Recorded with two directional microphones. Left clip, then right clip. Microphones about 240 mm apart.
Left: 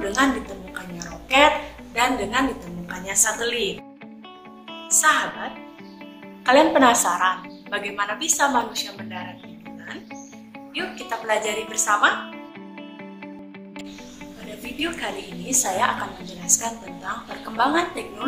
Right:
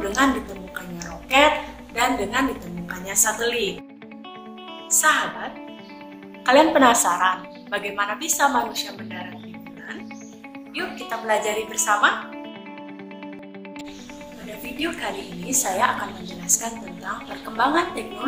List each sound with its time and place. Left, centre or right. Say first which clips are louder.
0.0 s a woman's voice: even; centre
0.7 s chewing: right 2 dB; centre
2.0 s a woman's voice: even; centre
4.8 s a woman's voice: even; centre
10.7 s a woman's voice: even; centre
14.8 s a woman's voice: even; centre